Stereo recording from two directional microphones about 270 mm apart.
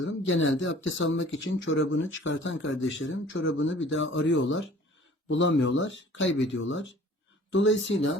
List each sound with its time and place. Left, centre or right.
0.0 s speech: left